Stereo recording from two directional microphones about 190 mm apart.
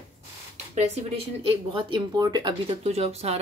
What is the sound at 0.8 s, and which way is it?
Speech, 30° right (ahead or behind).